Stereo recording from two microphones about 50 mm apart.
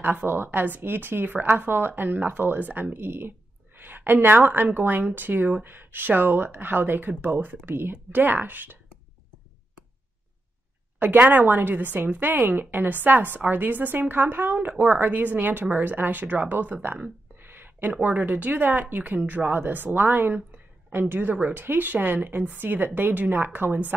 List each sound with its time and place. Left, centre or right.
0.0 s speech: right
11.0 s speech: right
17.4 s a sound: right
18.0 s speech: right